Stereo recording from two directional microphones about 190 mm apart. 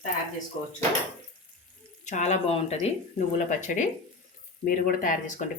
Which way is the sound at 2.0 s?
40° left (ahead or behind).